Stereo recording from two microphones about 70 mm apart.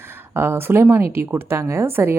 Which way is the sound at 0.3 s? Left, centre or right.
Right.